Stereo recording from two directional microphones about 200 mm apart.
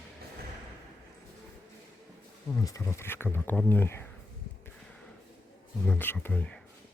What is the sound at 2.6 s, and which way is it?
Speech, 15° left (ahead or behind).